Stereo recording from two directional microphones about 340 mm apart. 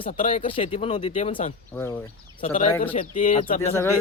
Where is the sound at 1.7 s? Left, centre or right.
Centre.